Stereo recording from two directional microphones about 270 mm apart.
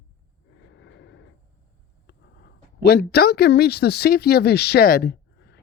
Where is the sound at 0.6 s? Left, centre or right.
Left.